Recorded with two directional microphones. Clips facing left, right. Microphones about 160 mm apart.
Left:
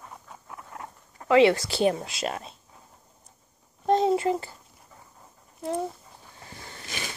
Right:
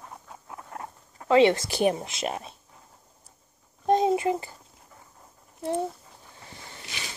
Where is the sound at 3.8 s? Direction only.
15° right (ahead or behind).